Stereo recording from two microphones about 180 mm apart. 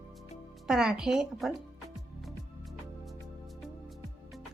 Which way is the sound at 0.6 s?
5° right (ahead or behind).